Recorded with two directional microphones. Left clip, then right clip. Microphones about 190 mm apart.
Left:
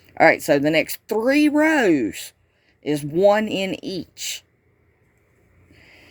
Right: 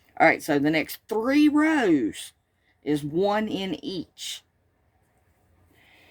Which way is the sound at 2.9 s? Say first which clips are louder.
Left 7 dB; 25° right (ahead or behind).